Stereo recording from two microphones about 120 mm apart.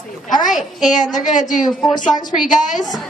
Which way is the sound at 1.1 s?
90° left.